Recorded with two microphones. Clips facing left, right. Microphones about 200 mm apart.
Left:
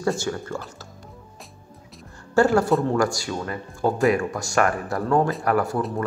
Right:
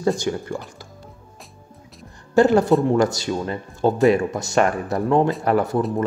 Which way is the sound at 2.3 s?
20° right (ahead or behind).